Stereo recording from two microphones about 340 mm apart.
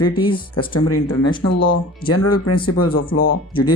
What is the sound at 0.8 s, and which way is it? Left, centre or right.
Speech, left.